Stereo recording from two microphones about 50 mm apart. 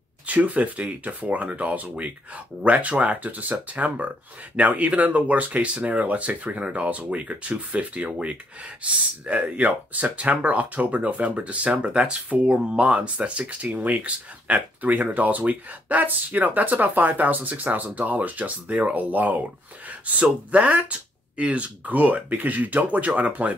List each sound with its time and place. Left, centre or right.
0.3 s speech: right